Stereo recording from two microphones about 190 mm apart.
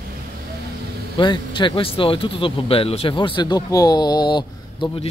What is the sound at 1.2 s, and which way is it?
Speech, 25° left (ahead or behind).